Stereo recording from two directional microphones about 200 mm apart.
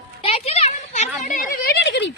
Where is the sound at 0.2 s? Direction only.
30° left (ahead or behind).